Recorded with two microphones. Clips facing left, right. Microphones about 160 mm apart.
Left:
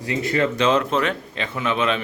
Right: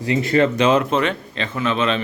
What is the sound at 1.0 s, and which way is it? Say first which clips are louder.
A man's voice: right 2 dB; 5° left (ahead or behind).